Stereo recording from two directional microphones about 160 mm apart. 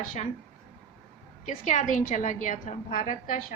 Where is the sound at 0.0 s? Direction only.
55° left (ahead or behind).